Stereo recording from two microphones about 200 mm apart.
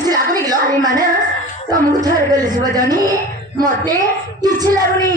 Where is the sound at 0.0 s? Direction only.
20° right (ahead or behind).